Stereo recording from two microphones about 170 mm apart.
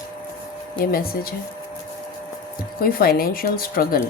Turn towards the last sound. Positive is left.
turn(degrees=60)  # may be behind; listen again after turning